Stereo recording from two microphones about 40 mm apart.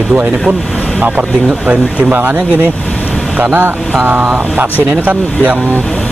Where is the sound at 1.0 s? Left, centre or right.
Right.